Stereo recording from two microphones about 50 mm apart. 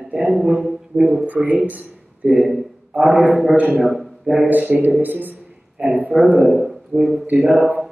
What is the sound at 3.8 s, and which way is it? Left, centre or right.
Speech, centre.